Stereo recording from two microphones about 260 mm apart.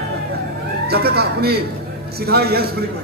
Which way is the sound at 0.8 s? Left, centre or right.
Right.